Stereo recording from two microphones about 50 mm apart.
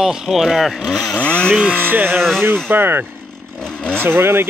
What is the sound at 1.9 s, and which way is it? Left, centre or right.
Speech, right.